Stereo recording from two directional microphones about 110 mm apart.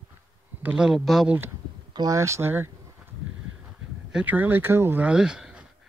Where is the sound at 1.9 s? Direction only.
30° right (ahead or behind).